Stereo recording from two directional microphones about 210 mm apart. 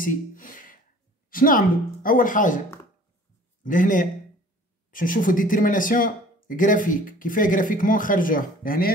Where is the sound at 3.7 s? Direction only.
40° left (ahead or behind).